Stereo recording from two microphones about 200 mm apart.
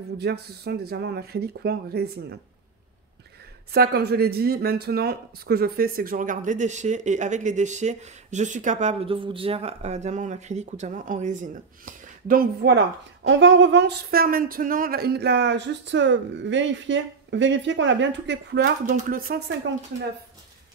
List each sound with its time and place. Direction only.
0.2 s speech: 55° right (ahead or behind)
3.7 s speech: 50° right (ahead or behind)
18.9 s speech: 45° right (ahead or behind)